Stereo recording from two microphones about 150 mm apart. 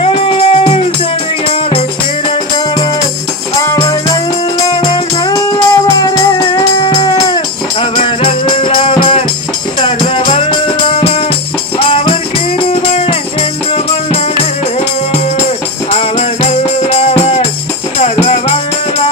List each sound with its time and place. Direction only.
0.0 s music: 40° left (ahead or behind)
4.6 s music: 30° left (ahead or behind)
10.3 s music: 35° left (ahead or behind)
15.9 s music: 40° left (ahead or behind)